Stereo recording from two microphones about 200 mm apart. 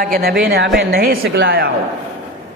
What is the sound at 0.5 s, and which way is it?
A man's voice, 60° right (ahead or behind).